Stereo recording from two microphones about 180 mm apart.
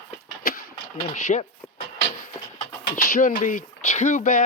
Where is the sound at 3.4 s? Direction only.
45° left (ahead or behind).